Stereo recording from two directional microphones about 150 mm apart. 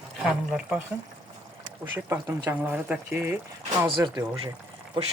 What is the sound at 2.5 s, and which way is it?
Speech, 15° right (ahead or behind).